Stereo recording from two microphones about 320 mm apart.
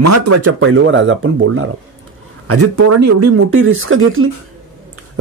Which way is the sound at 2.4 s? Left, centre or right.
Right.